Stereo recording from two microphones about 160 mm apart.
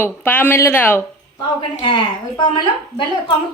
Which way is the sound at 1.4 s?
30° left (ahead or behind).